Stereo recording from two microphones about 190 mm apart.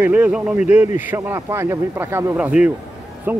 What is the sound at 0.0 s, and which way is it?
Speech, 10° right (ahead or behind).